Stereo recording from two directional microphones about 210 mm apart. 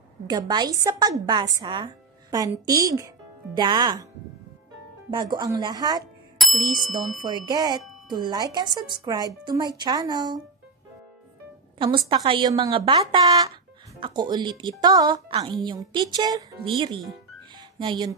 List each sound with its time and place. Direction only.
0.3 s a woman's voice: 20° right (ahead or behind)
5.1 s speech: 20° right (ahead or behind)
6.4 s bicycle bell: centre (ahead or behind)
7.2 s speech: 20° right (ahead or behind)
11.8 s speech: 25° right (ahead or behind)
17.6 s music: 20° right (ahead or behind)